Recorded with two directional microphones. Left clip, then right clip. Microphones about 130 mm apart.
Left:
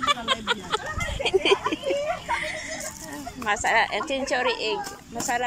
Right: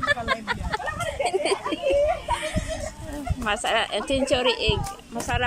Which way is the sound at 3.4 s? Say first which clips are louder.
Left 2 dB; 10° right (ahead or behind).